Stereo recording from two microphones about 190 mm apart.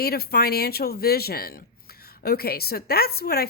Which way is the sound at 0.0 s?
55° left (ahead or behind).